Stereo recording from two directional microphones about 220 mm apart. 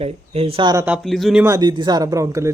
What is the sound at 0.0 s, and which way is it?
Speech, 25° right (ahead or behind).